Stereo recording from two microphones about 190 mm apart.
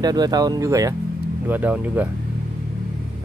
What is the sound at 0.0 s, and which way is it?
Speech, 20° right (ahead or behind).